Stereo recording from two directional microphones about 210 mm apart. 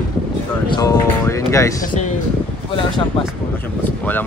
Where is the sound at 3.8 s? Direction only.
10° left (ahead or behind).